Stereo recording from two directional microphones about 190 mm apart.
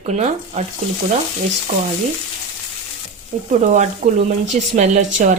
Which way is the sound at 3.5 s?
40° right (ahead or behind).